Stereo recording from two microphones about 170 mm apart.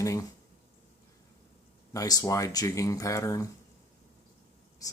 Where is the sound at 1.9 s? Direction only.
20° left (ahead or behind).